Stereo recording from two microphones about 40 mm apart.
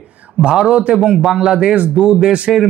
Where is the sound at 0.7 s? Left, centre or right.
Right.